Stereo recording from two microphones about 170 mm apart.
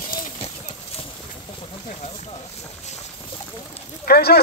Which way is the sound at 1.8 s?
40° left (ahead or behind).